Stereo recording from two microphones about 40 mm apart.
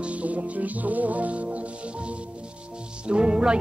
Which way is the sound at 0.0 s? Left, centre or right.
Right.